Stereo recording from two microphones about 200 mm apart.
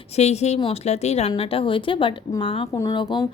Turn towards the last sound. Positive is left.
turn(degrees=25)  # may be behind; listen again after turning